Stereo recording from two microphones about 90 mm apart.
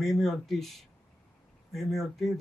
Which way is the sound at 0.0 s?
Centre (ahead or behind).